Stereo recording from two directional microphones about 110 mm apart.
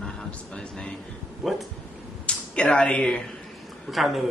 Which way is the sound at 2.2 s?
10° left (ahead or behind).